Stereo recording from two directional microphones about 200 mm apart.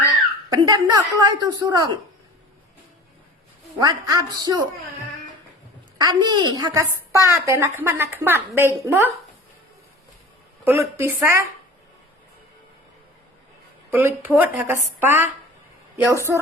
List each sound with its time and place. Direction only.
0.5 s speech: 20° right (ahead or behind)
3.8 s speech: 20° right (ahead or behind)
6.0 s a woman's voice: 20° right (ahead or behind)
10.7 s a woman's voice: 15° right (ahead or behind)
13.9 s a woman's voice: 10° right (ahead or behind)